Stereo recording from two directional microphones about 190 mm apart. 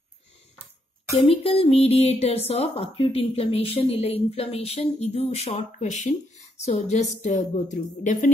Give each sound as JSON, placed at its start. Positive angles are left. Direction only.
{"t": 1.1, "sound": "speech", "side_deg": 30}